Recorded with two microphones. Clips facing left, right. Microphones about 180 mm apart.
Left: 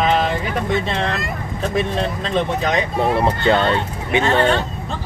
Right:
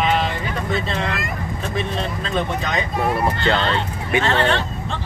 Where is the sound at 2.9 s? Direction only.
25° left (ahead or behind).